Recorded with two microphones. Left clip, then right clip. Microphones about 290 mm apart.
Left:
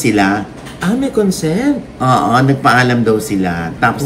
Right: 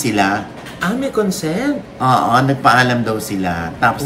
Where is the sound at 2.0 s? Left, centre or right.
Centre.